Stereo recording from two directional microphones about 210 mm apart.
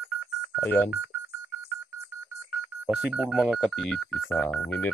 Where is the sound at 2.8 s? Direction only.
5° right (ahead or behind).